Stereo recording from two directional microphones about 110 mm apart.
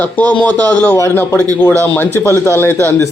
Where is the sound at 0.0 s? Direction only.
15° left (ahead or behind).